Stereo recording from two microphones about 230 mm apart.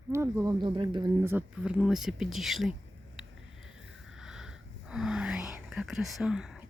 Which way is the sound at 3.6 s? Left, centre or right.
Centre.